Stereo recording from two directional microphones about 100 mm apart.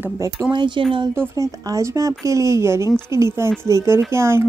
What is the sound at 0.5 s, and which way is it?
Speech, 50° right (ahead or behind).